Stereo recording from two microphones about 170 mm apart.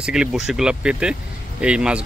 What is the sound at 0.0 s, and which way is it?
Speech, 5° right (ahead or behind).